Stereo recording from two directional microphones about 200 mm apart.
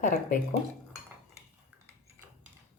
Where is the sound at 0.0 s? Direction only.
40° left (ahead or behind).